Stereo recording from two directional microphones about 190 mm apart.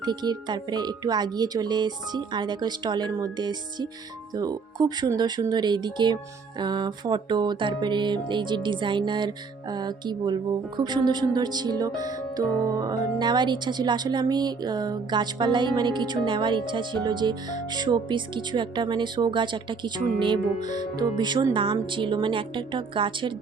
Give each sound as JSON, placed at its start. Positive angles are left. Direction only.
{"t": 0.0, "sound": "music", "side_deg": -20}
{"t": 20.6, "sound": "speech", "side_deg": 40}
{"t": 20.9, "sound": "music", "side_deg": -20}